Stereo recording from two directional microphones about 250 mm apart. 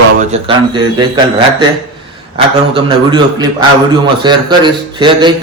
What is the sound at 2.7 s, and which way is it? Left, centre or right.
A man's voice, centre.